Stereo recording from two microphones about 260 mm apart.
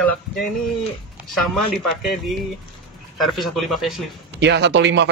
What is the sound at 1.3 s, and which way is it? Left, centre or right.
Speech, centre.